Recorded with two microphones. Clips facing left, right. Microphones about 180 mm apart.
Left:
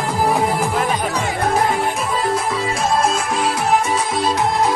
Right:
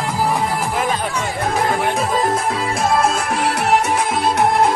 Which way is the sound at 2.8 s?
55° right (ahead or behind).